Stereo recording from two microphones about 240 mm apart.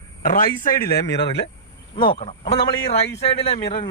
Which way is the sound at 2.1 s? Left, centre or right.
Left.